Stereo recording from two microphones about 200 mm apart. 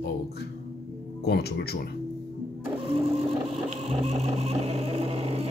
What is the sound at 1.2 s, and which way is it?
Speech, 55° left (ahead or behind).